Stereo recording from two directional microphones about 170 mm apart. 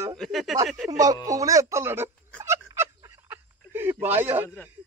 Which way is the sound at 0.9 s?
20° right (ahead or behind).